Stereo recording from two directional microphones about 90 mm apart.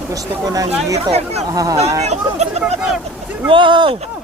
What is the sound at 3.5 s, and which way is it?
Speech, 65° right (ahead or behind).